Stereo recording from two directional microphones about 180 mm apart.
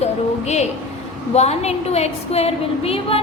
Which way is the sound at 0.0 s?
40° left (ahead or behind).